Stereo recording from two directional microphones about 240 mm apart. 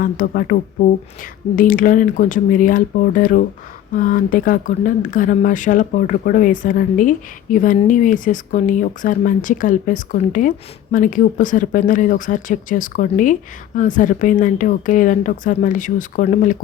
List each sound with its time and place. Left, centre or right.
0.0 s speech: left